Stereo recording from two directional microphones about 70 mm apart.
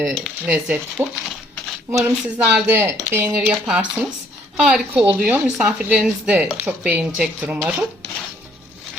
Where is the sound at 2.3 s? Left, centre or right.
Right.